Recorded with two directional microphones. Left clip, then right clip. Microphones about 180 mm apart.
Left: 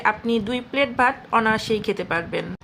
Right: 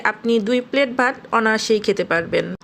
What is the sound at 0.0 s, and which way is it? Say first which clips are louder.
A woman's voice: right 3 dB; 25° right (ahead or behind).